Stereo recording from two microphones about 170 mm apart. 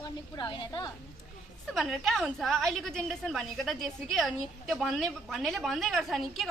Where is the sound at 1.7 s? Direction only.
Centre (ahead or behind).